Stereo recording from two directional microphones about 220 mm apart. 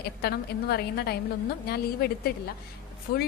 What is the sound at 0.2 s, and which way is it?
A woman's voice, 45° left (ahead or behind).